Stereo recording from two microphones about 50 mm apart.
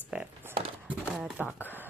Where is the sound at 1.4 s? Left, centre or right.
Right.